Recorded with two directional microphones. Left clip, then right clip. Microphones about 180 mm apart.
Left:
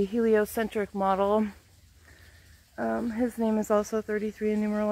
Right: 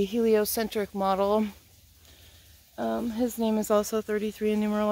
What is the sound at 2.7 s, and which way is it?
A woman's voice, 5° left (ahead or behind).